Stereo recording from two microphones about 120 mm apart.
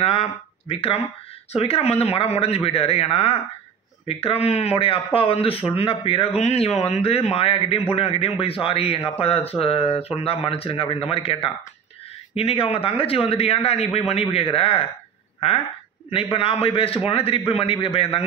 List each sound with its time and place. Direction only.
0.0 s speech: 50° left (ahead or behind)
16.1 s speech: 50° left (ahead or behind)